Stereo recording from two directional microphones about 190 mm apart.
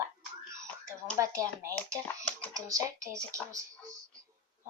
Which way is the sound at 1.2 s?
15° right (ahead or behind).